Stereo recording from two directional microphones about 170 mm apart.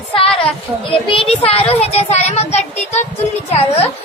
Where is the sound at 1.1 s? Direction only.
35° left (ahead or behind).